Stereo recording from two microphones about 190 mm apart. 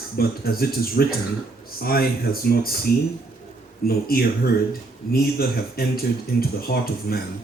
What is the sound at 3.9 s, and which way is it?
Speech, 50° left (ahead or behind).